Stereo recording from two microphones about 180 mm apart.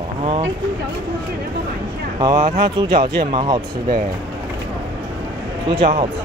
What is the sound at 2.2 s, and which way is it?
Speech, 20° right (ahead or behind).